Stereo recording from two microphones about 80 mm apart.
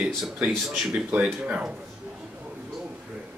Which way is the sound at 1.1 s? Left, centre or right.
Centre.